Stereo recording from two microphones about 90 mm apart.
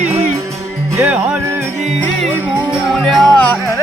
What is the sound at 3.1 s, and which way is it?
Music, centre (ahead or behind).